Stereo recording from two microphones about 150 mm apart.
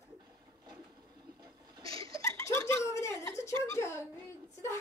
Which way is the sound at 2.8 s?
20° left (ahead or behind).